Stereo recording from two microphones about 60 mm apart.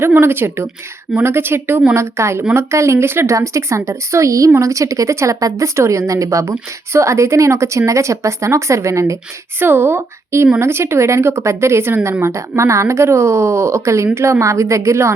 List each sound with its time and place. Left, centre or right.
0.0 s speech: right
2.0 s a woman's voice: right
9.6 s a woman's voice: right